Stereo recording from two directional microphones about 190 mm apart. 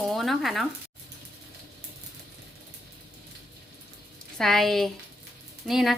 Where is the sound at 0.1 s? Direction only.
Centre (ahead or behind).